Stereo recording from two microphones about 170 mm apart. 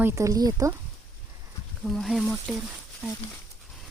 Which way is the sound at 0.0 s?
15° right (ahead or behind).